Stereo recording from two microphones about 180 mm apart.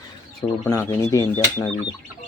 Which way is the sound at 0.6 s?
10° left (ahead or behind).